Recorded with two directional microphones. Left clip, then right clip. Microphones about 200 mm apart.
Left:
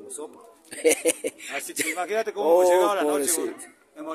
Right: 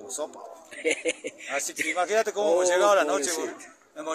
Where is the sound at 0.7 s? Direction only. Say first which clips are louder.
Left 5 dB; 40° left (ahead or behind).